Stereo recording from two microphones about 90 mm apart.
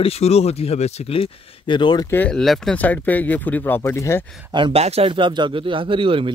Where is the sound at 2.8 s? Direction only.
20° left (ahead or behind).